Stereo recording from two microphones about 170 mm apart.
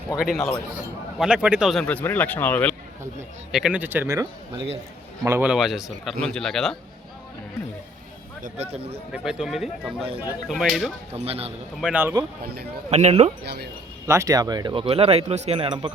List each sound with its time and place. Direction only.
0.2 s a man's voice: centre (ahead or behind)
3.5 s a man's voice: 5° right (ahead or behind)
8.4 s speech: 40° right (ahead or behind)
9.1 s a man's voice: 5° right (ahead or behind)
11.1 s speech: 35° right (ahead or behind)
11.8 s speech: 10° right (ahead or behind)
12.9 s speech: 40° right (ahead or behind)
13.4 s speech: 75° right (ahead or behind)
14.1 s speech: 20° right (ahead or behind)